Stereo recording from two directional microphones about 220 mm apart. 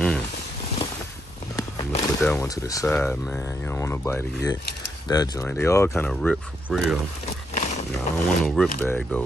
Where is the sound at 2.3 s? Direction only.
15° left (ahead or behind).